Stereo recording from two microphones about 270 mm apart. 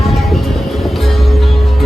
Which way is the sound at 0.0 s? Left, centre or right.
Centre.